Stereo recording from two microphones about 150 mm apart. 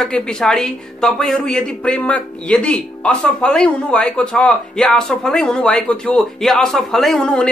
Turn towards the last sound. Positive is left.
turn(degrees=5)  # may be behind; listen again after turning